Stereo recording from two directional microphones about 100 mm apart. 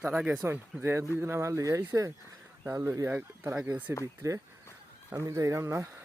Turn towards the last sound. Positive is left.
turn(degrees=-30)  # may be behind; listen again after turning